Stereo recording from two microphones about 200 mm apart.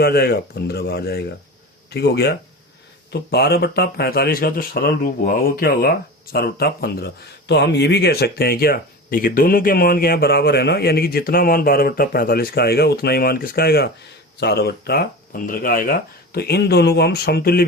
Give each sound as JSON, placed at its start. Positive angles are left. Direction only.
{"t": 0.0, "sound": "speech", "side_deg": 50}